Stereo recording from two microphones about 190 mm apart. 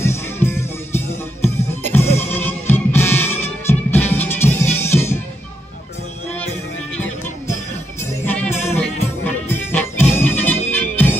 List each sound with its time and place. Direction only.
0.0 s music: 15° left (ahead or behind)
8.0 s music: 10° left (ahead or behind)
8.5 s music: 35° left (ahead or behind)
9.2 s music: 10° left (ahead or behind)